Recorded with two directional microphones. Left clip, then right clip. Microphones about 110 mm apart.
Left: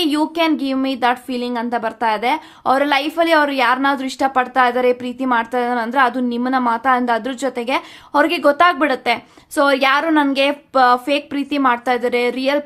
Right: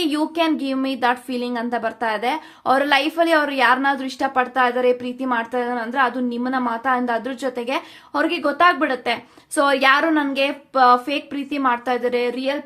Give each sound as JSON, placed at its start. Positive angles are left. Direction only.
{"t": 0.0, "sound": "a woman's voice", "side_deg": 25}